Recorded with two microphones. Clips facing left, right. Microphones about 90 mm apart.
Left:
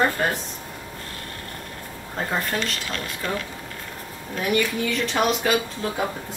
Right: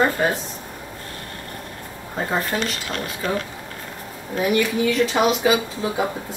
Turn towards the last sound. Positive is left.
turn(degrees=-10)  # may be behind; listen again after turning